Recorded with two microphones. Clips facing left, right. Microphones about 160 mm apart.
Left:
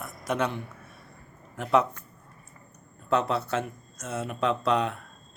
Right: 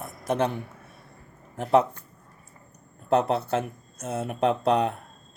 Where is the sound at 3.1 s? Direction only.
55° right (ahead or behind).